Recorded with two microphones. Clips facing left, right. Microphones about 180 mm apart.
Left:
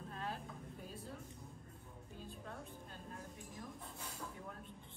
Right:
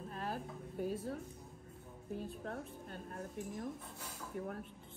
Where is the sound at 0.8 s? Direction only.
65° right (ahead or behind).